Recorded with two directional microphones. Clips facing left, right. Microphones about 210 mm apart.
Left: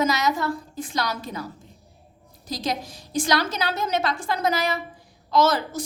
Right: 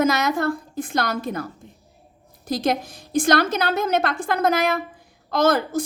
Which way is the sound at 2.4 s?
55° right (ahead or behind).